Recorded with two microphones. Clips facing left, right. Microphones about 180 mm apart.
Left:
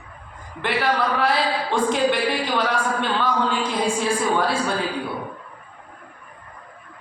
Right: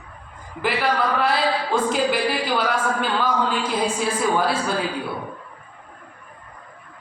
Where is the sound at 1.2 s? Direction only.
Centre (ahead or behind).